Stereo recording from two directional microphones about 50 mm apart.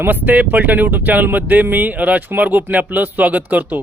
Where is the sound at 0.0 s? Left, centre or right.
Right.